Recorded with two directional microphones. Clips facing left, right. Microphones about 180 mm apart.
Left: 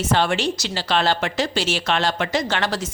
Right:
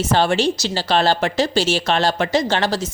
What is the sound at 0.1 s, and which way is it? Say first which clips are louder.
Speech: right 3 dB; 35° right (ahead or behind).